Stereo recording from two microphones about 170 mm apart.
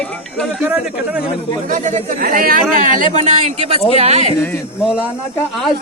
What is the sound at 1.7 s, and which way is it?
Speech, 50° right (ahead or behind).